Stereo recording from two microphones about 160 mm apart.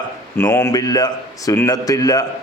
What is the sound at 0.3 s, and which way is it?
A man's voice, 15° left (ahead or behind).